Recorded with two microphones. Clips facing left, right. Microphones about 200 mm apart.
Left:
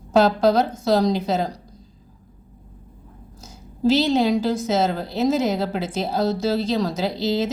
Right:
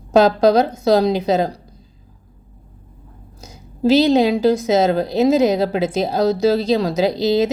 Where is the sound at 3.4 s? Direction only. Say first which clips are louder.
Right 2 dB; 15° right (ahead or behind).